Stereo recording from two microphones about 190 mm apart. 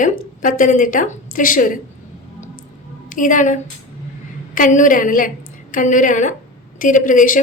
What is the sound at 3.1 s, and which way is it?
A woman's voice, 45° left (ahead or behind).